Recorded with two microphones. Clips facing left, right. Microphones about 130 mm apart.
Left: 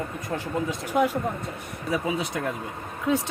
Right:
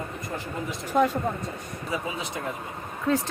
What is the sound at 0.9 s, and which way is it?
Speech, 10° left (ahead or behind).